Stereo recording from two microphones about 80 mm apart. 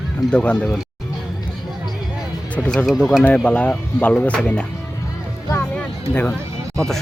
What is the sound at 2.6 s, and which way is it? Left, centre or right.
Speech, centre.